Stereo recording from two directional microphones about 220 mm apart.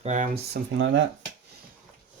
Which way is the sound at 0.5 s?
55° right (ahead or behind).